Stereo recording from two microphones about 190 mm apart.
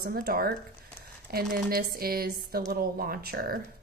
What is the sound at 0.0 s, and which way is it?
Speech, 55° right (ahead or behind).